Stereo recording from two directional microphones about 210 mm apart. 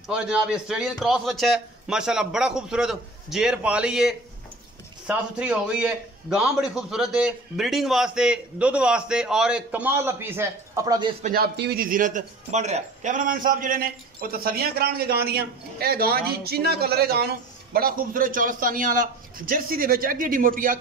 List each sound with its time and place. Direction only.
0.1 s a man's voice: 5° right (ahead or behind); by 11.1 s 20° right (ahead or behind)
11.2 s a man's voice: 45° right (ahead or behind)